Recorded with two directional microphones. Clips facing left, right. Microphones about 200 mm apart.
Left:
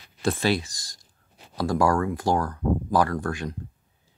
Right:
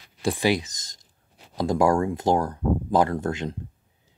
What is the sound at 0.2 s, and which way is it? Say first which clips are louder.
Speech: right 1 dB; 15° right (ahead or behind).